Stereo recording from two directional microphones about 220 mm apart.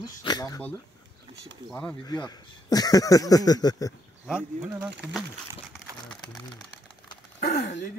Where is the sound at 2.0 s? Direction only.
20° left (ahead or behind).